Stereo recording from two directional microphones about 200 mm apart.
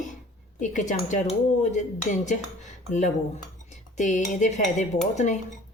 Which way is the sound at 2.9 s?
40° left (ahead or behind).